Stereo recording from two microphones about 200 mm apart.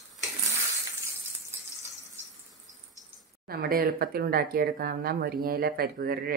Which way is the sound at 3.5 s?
50° right (ahead or behind).